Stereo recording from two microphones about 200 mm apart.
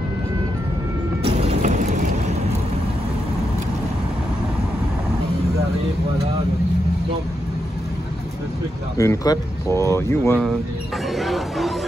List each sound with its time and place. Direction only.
1.2 s vehicle: 30° right (ahead or behind)
8.9 s speech: 15° left (ahead or behind)
11.1 s chatter: centre (ahead or behind)